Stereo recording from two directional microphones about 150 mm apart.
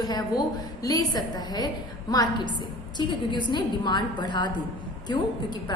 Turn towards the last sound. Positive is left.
turn(degrees=30)  # may be behind; listen again after turning